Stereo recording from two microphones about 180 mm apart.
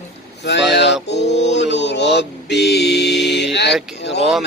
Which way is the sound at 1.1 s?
70° left (ahead or behind).